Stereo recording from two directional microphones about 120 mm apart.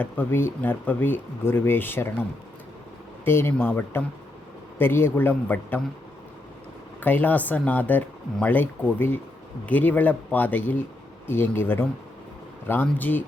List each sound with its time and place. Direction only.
0.0 s speech: 15° left (ahead or behind)
3.2 s speech: 20° left (ahead or behind)
7.0 s speech: 15° left (ahead or behind)